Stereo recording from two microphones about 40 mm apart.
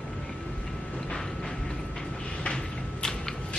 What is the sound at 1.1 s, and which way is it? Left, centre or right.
Train, centre.